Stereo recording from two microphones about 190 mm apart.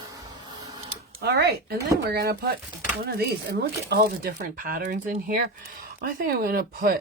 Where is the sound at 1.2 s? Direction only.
55° right (ahead or behind).